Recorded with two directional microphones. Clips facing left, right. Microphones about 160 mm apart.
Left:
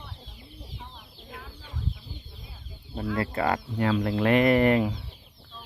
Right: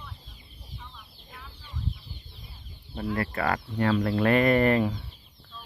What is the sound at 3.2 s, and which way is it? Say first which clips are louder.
Speech: left 3 dB; 20° left (ahead or behind).